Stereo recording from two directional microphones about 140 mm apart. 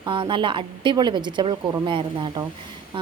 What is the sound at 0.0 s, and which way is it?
A woman's voice, 35° right (ahead or behind).